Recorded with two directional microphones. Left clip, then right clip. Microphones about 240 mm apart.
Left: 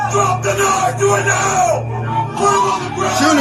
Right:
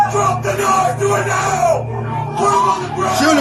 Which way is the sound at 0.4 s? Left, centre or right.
Left.